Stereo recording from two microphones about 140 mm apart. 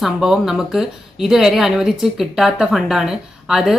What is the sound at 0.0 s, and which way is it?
Speech, centre (ahead or behind).